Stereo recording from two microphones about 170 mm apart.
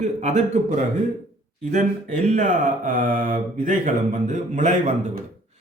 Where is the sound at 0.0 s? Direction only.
45° right (ahead or behind).